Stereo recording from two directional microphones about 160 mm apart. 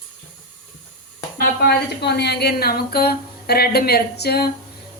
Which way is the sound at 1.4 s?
85° left.